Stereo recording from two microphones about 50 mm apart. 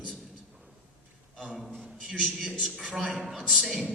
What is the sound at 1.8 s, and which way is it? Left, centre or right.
Speech, centre.